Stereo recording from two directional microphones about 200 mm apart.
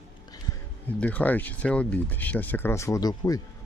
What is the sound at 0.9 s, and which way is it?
Speech, 10° left (ahead or behind).